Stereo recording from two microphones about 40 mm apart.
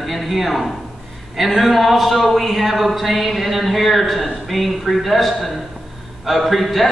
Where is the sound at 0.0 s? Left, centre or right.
Centre.